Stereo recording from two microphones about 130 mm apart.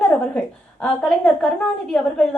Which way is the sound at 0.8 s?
5° left (ahead or behind).